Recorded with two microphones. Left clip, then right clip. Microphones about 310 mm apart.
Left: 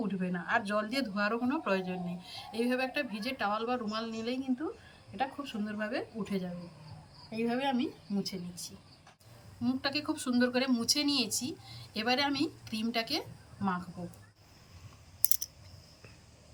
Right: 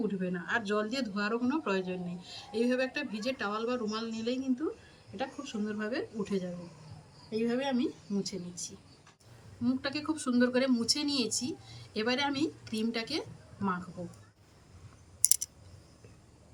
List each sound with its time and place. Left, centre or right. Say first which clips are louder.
0.1 s speech: left 1 dB; centre
11.3 s speech: right 1 dB; centre
11.7 s speech: left 1 dB; centre